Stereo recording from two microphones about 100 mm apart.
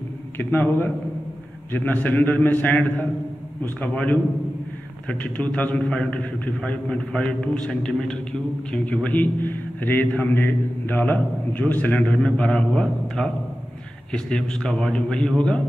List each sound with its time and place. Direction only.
0.4 s a man's voice: 20° left (ahead or behind)